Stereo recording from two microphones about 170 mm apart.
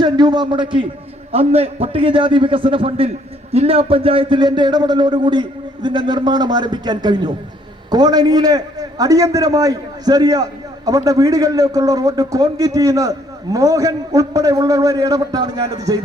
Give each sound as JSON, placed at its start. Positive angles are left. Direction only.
{"t": 0.0, "sound": "a man's voice", "side_deg": -25}